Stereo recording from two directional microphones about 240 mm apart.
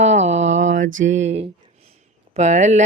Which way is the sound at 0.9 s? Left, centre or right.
Right.